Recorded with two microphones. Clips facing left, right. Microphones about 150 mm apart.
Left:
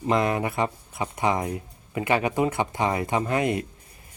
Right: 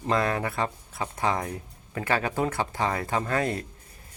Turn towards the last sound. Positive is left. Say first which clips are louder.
# left 3 dB
turn(degrees=15)  # may be behind; listen again after turning